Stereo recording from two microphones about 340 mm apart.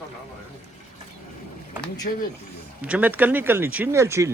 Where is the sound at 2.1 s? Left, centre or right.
Left.